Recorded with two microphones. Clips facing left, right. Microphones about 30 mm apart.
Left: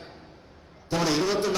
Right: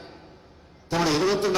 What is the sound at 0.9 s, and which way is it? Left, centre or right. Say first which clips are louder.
Speech: right 2 dB; centre.